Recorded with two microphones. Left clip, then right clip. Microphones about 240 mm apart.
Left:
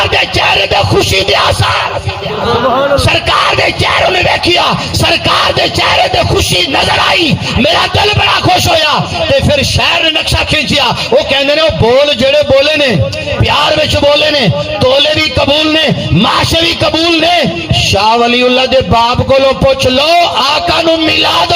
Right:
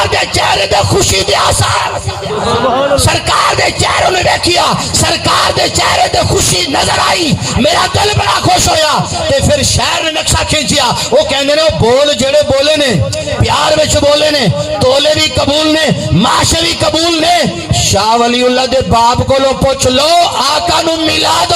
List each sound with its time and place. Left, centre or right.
0.0 s music: left
3.6 s a man's voice: left
11.3 s a man's voice: left
13.7 s a man's voice: left
17.9 s a man's voice: left